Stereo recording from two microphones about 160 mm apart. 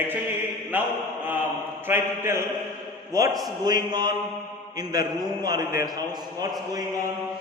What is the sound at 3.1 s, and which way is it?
A man's voice, 20° right (ahead or behind).